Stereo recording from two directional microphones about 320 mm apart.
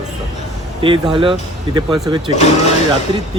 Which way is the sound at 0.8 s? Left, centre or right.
Centre.